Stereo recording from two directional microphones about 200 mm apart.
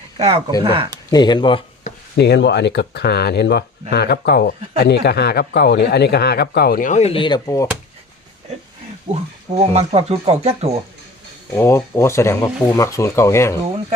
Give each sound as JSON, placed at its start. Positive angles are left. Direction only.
{"t": 0.2, "sound": "speech", "side_deg": -30}
{"t": 1.1, "sound": "speech", "side_deg": 20}
{"t": 2.1, "sound": "speech", "side_deg": 55}
{"t": 9.1, "sound": "speech", "side_deg": -25}
{"t": 11.5, "sound": "speech", "side_deg": 15}